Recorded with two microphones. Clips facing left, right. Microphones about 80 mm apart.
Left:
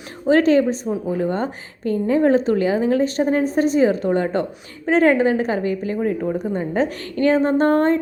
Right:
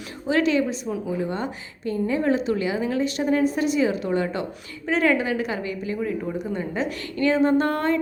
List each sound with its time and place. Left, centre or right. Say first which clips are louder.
0.3 s a woman's voice: left 6 dB; left